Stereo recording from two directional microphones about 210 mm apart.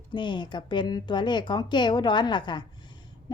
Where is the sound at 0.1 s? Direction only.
20° left (ahead or behind).